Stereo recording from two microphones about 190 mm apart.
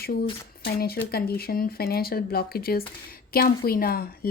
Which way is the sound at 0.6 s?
55° left (ahead or behind).